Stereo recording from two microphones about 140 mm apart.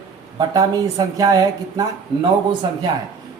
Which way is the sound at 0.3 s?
30° right (ahead or behind).